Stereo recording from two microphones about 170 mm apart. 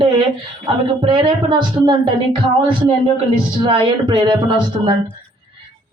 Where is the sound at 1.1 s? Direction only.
30° right (ahead or behind).